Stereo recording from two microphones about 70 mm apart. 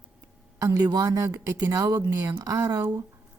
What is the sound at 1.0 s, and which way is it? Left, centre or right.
A woman's voice, right.